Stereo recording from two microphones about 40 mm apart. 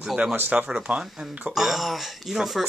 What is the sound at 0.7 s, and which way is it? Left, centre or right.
Speech, right.